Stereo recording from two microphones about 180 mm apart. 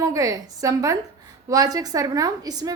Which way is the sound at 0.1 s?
20° right (ahead or behind).